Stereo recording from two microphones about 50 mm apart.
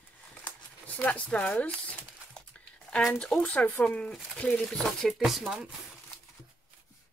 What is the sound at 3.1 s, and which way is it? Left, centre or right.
Speech, centre.